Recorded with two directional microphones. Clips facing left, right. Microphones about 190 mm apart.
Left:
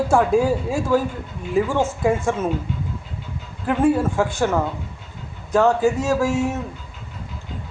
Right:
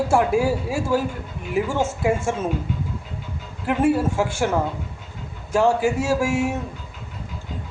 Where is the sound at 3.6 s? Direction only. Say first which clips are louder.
Left 1 dB; 10° right (ahead or behind).